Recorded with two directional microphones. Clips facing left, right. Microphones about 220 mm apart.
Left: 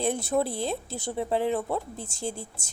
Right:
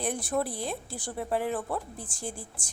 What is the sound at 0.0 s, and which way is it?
A woman's voice, 25° left (ahead or behind).